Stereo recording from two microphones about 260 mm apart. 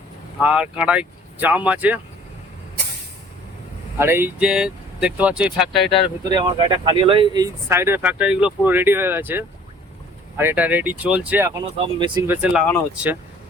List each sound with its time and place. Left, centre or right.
0.3 s speech: centre
3.9 s speech: centre
6.3 s speech: centre
12.4 s speech: centre